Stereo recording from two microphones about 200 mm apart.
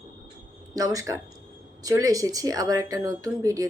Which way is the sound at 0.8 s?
15° right (ahead or behind).